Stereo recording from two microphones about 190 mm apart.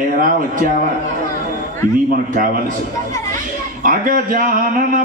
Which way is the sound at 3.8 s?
45° right (ahead or behind).